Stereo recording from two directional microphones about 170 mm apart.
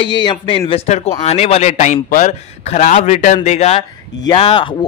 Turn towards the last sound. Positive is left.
turn(degrees=30)  # may be behind; listen again after turning